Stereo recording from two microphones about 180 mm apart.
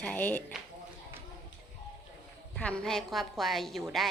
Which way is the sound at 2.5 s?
5° left (ahead or behind).